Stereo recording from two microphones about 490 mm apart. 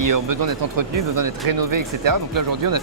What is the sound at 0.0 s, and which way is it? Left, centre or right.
Speech, right.